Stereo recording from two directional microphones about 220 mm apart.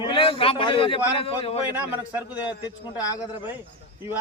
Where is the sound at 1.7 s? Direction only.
5° right (ahead or behind).